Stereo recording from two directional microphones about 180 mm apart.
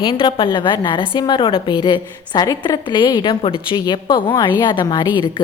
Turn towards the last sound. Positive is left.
turn(degrees=25)  # may be behind; listen again after turning